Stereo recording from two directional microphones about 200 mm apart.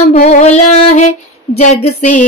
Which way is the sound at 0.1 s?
35° left (ahead or behind).